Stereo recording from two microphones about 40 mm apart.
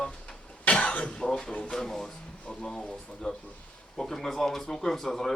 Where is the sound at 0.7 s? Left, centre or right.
Left.